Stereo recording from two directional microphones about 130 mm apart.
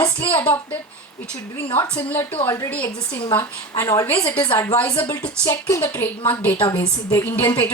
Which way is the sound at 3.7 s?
30° left (ahead or behind).